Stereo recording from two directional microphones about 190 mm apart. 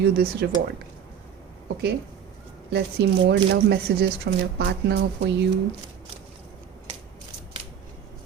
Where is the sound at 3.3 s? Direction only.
60° right (ahead or behind).